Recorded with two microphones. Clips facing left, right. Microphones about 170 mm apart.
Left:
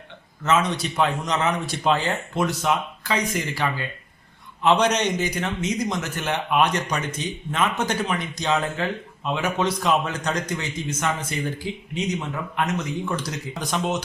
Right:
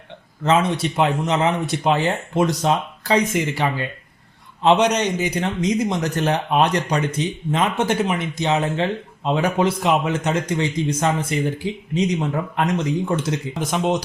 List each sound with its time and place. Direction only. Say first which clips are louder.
0.4 s speech: right 4 dB; 30° right (ahead or behind)
2.4 s a man's voice: right 4 dB; 35° right (ahead or behind)
4.9 s a man's voice: right 2 dB; 10° right (ahead or behind)
5.3 s a man's voice: right 5 dB; 30° right (ahead or behind)
9.8 s a man's voice: right 3 dB; 20° right (ahead or behind)